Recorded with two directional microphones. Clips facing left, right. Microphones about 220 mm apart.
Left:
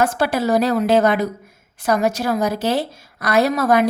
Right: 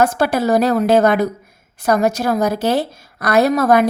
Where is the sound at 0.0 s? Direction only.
45° right (ahead or behind).